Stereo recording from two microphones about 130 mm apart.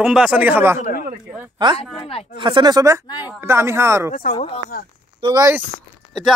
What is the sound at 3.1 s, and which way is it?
Speech, 30° left (ahead or behind).